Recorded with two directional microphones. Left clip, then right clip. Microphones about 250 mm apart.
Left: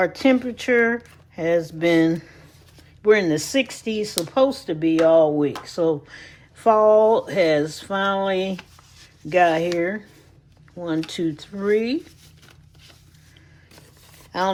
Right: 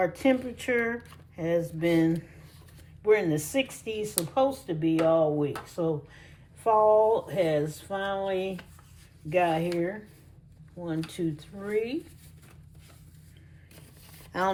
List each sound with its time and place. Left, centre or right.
0.0 s speech: centre
14.3 s speech: centre